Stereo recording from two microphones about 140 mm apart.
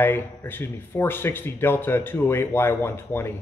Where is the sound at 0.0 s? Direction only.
15° left (ahead or behind).